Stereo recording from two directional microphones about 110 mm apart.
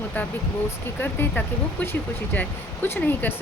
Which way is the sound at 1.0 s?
20° left (ahead or behind).